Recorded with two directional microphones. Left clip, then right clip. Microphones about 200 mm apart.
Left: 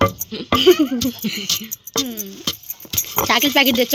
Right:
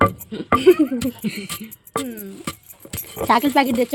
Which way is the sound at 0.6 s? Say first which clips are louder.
Left 1 dB; centre (ahead or behind).